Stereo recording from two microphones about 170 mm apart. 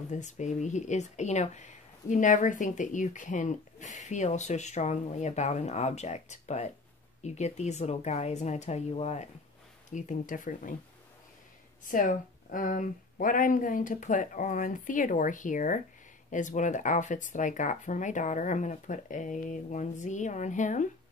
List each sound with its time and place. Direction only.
0.1 s speech: 45° left (ahead or behind)
9.9 s speech: 50° left (ahead or behind)
11.9 s speech: 50° left (ahead or behind)